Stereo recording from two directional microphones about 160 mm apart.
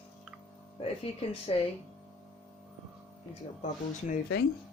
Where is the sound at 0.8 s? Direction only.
40° left (ahead or behind).